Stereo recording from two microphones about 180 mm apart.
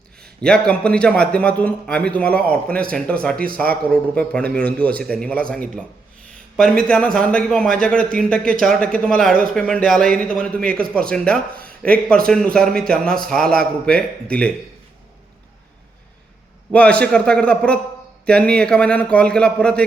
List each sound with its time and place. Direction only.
0.2 s a man's voice: 5° left (ahead or behind)
3.3 s a man's voice: 55° right (ahead or behind)
3.8 s a man's voice: 5° left (ahead or behind)
10.7 s a man's voice: 55° right (ahead or behind)
11.1 s speech: 5° left (ahead or behind)
16.7 s a man's voice: 5° left (ahead or behind)